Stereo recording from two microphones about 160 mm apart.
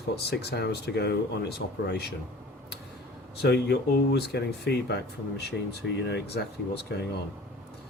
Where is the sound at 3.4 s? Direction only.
90° left.